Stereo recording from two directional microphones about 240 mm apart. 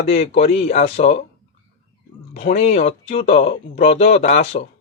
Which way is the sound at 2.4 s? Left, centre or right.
Left.